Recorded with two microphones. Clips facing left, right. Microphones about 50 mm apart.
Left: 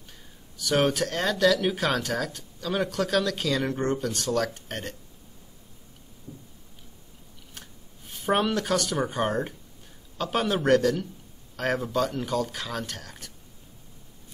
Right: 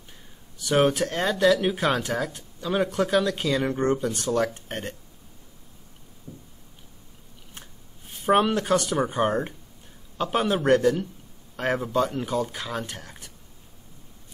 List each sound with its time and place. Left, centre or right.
0.6 s speech: centre
8.1 s speech: centre